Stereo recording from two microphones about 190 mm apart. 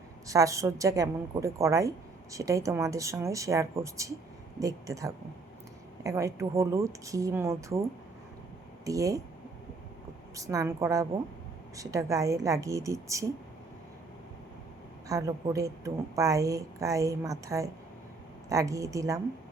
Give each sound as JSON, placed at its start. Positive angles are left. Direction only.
{"t": 0.3, "sound": "a woman's voice", "side_deg": -15}
{"t": 8.8, "sound": "speech", "side_deg": -20}
{"t": 10.3, "sound": "a woman's voice", "side_deg": -15}
{"t": 15.0, "sound": "a woman's voice", "side_deg": -20}